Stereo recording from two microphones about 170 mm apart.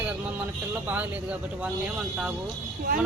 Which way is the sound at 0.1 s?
10° right (ahead or behind).